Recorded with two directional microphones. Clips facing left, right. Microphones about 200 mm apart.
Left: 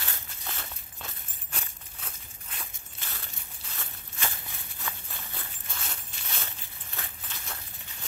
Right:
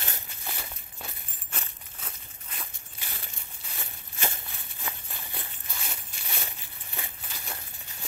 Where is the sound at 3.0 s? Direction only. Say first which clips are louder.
Even; 15° right (ahead or behind).